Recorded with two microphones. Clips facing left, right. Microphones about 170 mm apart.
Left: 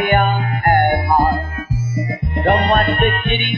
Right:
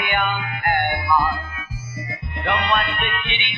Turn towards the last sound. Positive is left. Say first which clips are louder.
# left 10 dB
turn(degrees=45)  # may be behind; listen again after turning